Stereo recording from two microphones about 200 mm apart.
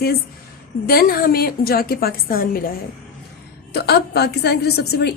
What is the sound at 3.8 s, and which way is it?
A woman's voice, 55° left (ahead or behind).